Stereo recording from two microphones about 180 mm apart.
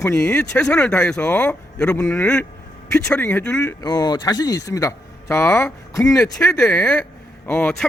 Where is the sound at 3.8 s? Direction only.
20° left (ahead or behind).